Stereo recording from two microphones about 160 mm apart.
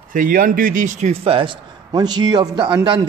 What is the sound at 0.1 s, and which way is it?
A man's voice, 60° right (ahead or behind).